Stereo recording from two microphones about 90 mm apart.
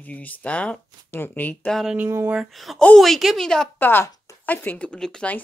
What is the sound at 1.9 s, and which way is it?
Speech, 25° right (ahead or behind).